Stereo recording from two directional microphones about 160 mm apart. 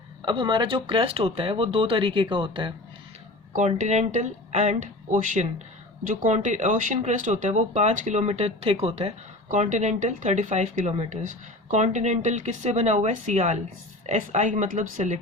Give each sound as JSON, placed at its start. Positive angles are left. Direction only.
{"t": 0.2, "sound": "speech", "side_deg": -30}
{"t": 3.7, "sound": "speech", "side_deg": -45}